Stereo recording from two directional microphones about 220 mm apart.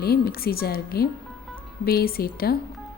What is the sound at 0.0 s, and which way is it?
Speech, 45° left (ahead or behind).